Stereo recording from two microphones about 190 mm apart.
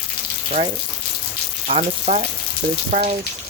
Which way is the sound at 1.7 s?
40° right (ahead or behind).